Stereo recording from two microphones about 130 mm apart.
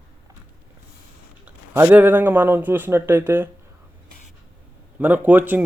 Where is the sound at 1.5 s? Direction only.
15° right (ahead or behind).